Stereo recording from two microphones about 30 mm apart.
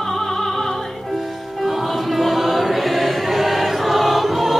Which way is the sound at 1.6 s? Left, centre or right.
Centre.